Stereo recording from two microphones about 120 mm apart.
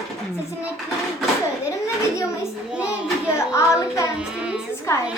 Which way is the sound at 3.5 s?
25° left (ahead or behind).